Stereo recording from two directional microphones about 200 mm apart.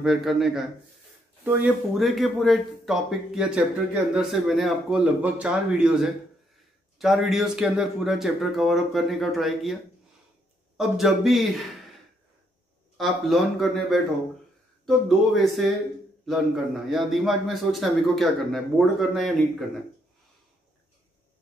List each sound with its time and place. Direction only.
0.0 s speech: centre (ahead or behind)
10.8 s speech: centre (ahead or behind)
12.9 s speech: centre (ahead or behind)